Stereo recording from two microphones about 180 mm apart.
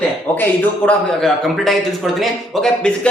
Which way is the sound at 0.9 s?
Centre (ahead or behind).